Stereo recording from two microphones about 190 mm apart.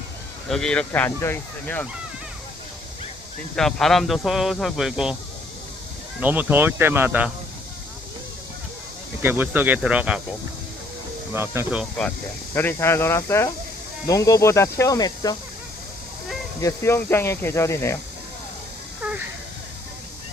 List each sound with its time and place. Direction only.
0.4 s speech: centre (ahead or behind)
3.5 s speech: centre (ahead or behind)
6.1 s speech: 10° right (ahead or behind)
9.2 s speech: 10° right (ahead or behind)
11.3 s speech: 10° right (ahead or behind)
12.5 s speech: 10° left (ahead or behind)
16.6 s speech: 15° left (ahead or behind)